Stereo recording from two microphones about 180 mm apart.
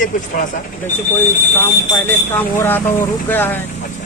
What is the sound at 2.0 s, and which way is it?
Speech, 10° left (ahead or behind).